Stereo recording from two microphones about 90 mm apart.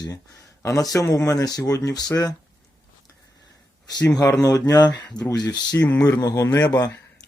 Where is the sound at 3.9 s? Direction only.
45° left (ahead or behind).